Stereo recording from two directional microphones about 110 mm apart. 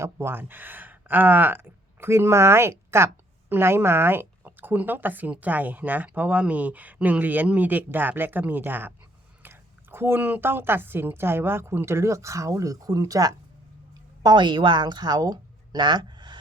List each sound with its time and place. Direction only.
0.0 s a woman's voice: 25° right (ahead or behind); by 16.4 s 45° right (ahead or behind)